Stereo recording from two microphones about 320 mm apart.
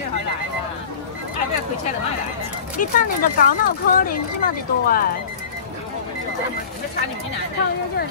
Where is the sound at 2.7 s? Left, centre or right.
Left.